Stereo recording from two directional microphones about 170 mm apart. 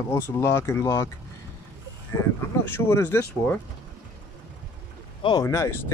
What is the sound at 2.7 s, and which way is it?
Speech, 15° left (ahead or behind).